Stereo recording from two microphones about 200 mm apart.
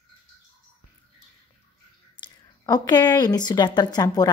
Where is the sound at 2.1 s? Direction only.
20° left (ahead or behind).